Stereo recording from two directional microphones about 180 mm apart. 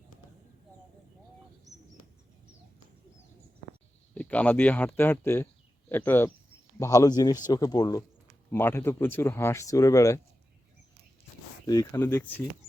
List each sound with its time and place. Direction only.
4.1 s a man's voice: 10° left (ahead or behind)
11.6 s speech: 20° left (ahead or behind)